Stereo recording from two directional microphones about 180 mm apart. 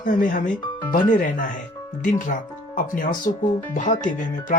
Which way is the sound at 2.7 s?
50° left (ahead or behind).